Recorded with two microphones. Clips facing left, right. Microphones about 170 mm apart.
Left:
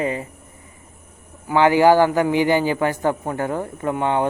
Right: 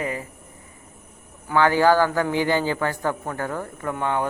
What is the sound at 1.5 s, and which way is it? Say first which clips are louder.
A man's voice: left 4 dB; 15° left (ahead or behind).